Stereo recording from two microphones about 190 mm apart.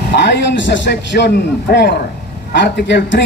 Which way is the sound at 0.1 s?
60° left (ahead or behind).